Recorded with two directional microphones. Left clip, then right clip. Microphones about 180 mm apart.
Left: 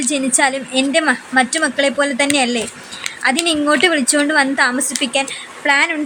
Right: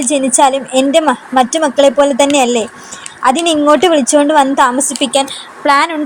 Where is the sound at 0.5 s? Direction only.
30° left (ahead or behind).